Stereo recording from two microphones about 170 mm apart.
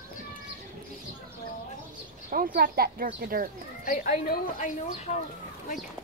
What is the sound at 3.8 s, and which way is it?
Speech, 55° left (ahead or behind).